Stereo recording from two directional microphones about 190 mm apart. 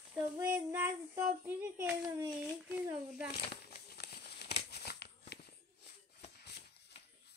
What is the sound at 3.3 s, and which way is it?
Crumpling, 55° left (ahead or behind).